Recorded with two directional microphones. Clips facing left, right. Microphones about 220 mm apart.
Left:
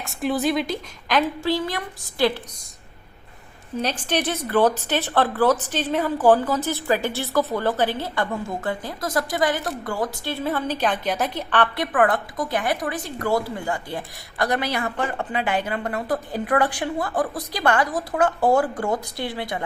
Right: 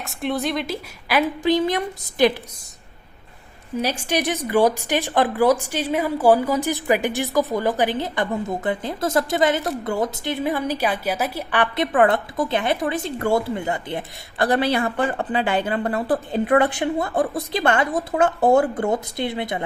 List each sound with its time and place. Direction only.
0.0 s a woman's voice: centre (ahead or behind)
1.4 s speech: 20° right (ahead or behind)
3.8 s a woman's voice: 10° right (ahead or behind)
11.9 s speech: 25° right (ahead or behind)